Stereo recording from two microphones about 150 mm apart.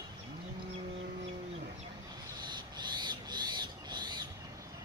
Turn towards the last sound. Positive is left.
turn(degrees=-30)  # may be behind; listen again after turning